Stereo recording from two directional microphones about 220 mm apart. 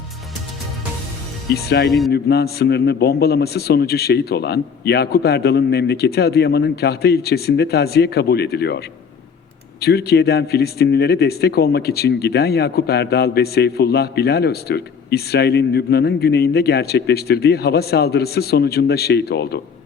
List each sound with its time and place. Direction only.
1.9 s a man's voice: centre (ahead or behind)
2.1 s speech: 45° left (ahead or behind)
9.8 s speech: 45° left (ahead or behind)